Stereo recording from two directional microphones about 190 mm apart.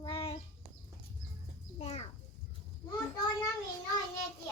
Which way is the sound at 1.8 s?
35° left (ahead or behind).